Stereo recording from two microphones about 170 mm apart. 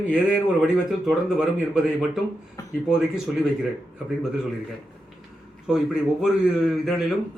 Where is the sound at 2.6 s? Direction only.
20° left (ahead or behind).